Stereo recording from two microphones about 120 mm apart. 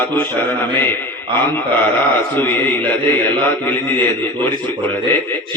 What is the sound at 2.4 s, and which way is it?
Speech, 15° left (ahead or behind).